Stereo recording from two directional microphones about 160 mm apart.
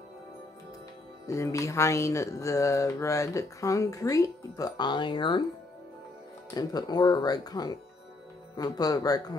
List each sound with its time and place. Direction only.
1.2 s speech: 20° left (ahead or behind)
6.5 s speech: 25° left (ahead or behind)